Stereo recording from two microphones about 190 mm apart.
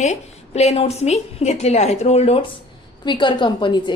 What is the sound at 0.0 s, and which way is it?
A woman's voice, 35° left (ahead or behind).